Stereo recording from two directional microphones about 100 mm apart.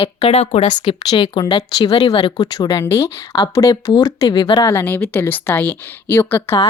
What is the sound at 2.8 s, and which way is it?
A woman's voice, 25° left (ahead or behind).